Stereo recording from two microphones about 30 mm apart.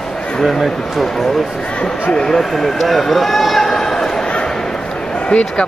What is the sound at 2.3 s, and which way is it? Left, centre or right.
Speech, centre.